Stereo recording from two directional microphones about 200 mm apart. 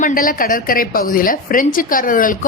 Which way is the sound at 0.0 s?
45° left (ahead or behind).